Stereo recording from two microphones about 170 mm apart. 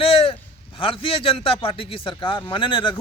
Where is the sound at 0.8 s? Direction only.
30° left (ahead or behind).